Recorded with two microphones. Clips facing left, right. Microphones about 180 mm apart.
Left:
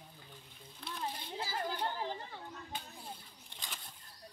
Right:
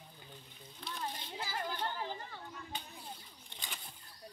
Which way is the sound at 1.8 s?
20° left (ahead or behind).